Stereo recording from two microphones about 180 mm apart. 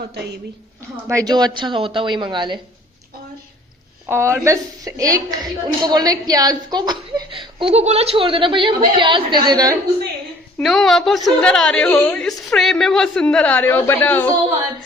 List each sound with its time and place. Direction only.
0.1 s a woman's voice: 65° right (ahead or behind)
1.0 s a woman's voice: 20° right (ahead or behind)
4.1 s a woman's voice: 15° right (ahead or behind)
10.6 s a woman's voice: centre (ahead or behind)